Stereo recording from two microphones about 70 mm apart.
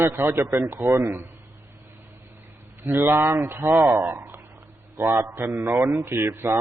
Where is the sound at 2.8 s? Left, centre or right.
Right.